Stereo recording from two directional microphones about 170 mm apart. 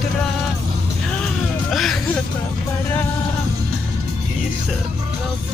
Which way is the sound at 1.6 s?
Centre (ahead or behind).